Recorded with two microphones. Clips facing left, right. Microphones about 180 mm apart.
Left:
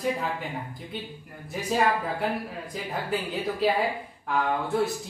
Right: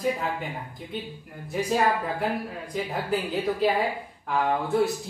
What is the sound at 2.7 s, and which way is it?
A woman's voice, centre (ahead or behind).